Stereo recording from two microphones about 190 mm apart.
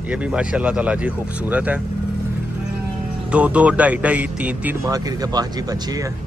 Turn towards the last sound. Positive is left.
turn(degrees=-20)  # may be behind; listen again after turning